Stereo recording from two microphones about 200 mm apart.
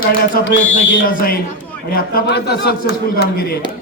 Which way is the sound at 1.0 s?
45° left (ahead or behind).